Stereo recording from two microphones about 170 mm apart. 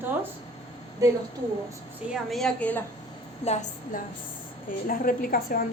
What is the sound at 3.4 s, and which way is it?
Speech, 40° left (ahead or behind).